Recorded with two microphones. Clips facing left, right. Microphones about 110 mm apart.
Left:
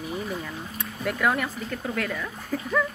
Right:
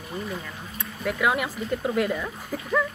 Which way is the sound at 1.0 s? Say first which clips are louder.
Right 1 dB; 10° right (ahead or behind).